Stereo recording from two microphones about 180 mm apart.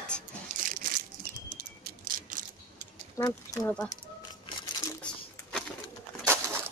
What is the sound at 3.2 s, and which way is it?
Speech, 15° left (ahead or behind).